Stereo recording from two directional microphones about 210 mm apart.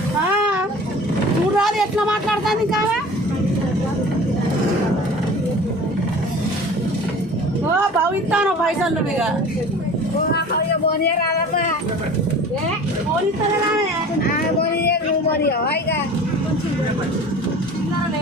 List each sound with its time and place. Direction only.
1.5 s a sound: centre (ahead or behind)
8.3 s speech: 5° right (ahead or behind)
15.4 s speech: 50° left (ahead or behind)